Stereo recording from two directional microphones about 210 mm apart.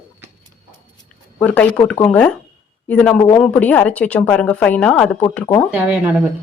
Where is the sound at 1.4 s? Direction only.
5° left (ahead or behind).